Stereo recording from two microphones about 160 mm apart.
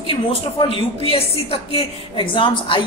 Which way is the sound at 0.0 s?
35° left (ahead or behind).